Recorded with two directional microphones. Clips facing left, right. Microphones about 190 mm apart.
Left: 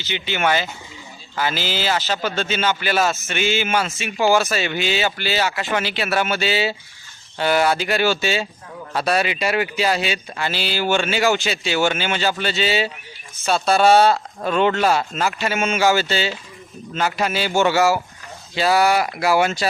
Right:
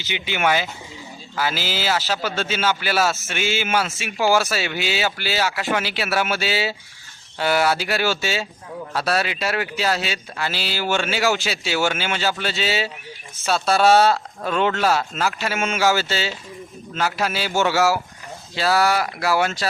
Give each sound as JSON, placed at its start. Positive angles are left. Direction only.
{"t": 0.0, "sound": "speech", "side_deg": -10}
{"t": 10.3, "sound": "speech", "side_deg": -5}
{"t": 19.4, "sound": "speech", "side_deg": 0}